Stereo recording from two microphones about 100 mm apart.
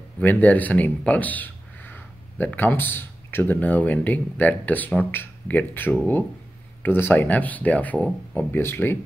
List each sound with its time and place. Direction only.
0.2 s speech: 15° left (ahead or behind)